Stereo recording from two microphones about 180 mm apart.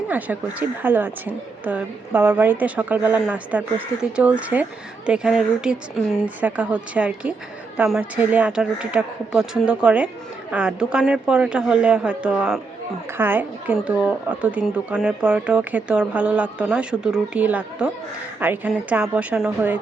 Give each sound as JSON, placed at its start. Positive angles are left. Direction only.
{"t": 0.1, "sound": "speech", "side_deg": -10}